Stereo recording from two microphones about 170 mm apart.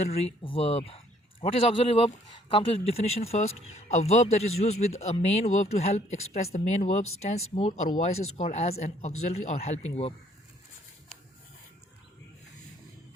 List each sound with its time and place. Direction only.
0.0 s a man's voice: 35° left (ahead or behind)